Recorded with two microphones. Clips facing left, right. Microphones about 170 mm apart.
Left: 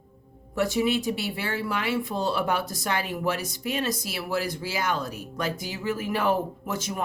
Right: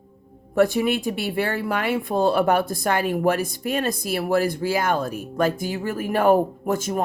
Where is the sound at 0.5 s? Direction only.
55° right (ahead or behind).